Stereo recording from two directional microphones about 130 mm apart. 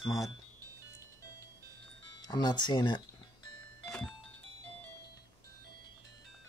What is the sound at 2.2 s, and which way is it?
Speech, 30° left (ahead or behind).